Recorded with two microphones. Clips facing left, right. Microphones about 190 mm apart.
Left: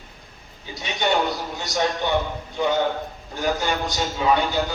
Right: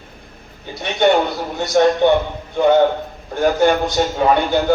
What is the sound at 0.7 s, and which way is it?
A man's voice, 60° right (ahead or behind).